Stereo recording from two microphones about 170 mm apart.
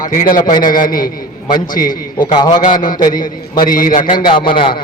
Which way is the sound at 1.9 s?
25° left (ahead or behind).